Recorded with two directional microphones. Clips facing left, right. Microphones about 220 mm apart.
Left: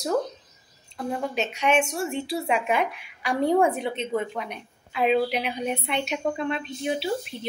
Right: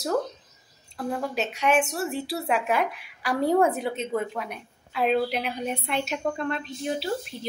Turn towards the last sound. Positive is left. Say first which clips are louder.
# left 1 dB
turn(degrees=25)  # may be behind; listen again after turning